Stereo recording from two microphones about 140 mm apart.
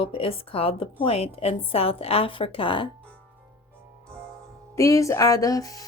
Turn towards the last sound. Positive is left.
turn(degrees=25)  # may be behind; listen again after turning